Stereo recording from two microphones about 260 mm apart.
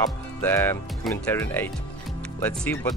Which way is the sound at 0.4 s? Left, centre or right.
Centre.